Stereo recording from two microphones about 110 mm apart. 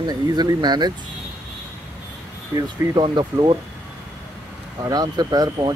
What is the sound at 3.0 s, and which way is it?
Speech, 45° right (ahead or behind).